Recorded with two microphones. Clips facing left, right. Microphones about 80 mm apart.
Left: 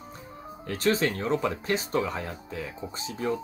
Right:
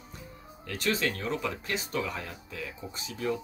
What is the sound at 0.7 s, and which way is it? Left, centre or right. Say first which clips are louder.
Speech: left 5 dB; left.